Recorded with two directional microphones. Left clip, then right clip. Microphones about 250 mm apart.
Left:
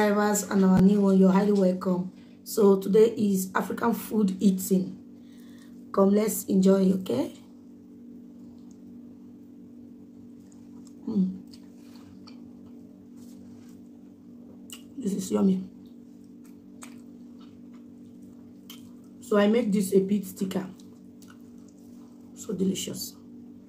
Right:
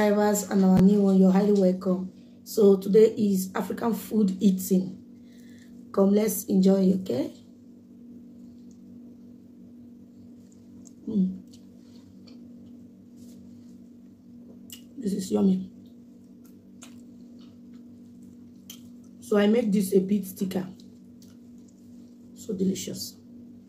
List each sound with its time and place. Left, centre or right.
0.0 s speech: centre
5.9 s speech: centre
15.0 s speech: centre
19.2 s speech: centre
22.7 s speech: centre